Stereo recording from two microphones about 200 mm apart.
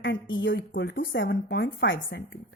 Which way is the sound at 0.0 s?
65° left (ahead or behind).